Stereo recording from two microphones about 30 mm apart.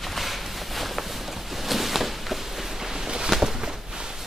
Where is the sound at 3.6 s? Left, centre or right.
Right.